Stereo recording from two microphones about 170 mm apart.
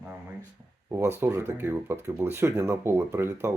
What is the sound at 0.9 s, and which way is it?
Speech, 15° right (ahead or behind).